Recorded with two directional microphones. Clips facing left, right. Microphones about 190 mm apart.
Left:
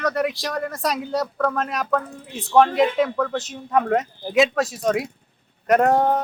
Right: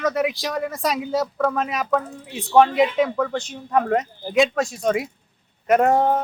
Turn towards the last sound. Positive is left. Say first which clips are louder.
# even
turn(degrees=0)  # may be behind; listen again after turning